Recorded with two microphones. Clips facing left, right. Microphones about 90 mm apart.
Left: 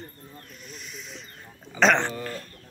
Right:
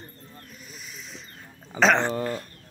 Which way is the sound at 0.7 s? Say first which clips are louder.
Left 2 dB; centre (ahead or behind).